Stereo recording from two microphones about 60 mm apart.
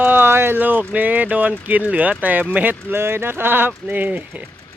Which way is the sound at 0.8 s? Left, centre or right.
Right.